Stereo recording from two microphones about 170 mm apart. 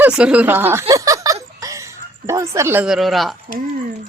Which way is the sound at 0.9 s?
20° right (ahead or behind).